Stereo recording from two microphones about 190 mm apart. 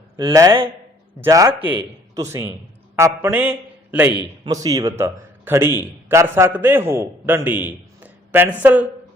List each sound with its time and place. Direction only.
0.2 s speech: 20° right (ahead or behind)
4.4 s a man's voice: 20° right (ahead or behind)